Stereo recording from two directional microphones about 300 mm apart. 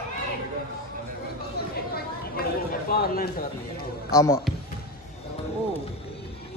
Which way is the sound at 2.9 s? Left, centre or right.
Left.